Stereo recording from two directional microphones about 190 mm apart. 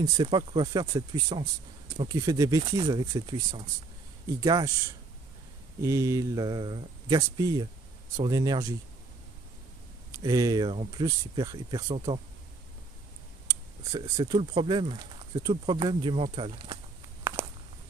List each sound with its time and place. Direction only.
0.0 s speech: 25° right (ahead or behind)
5.8 s speech: 15° right (ahead or behind)
10.1 s speech: 20° right (ahead or behind)
13.5 s speech: 15° right (ahead or behind)
17.4 s walk: 10° right (ahead or behind)